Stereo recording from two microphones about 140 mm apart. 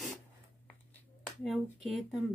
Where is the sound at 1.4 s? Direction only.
Centre (ahead or behind).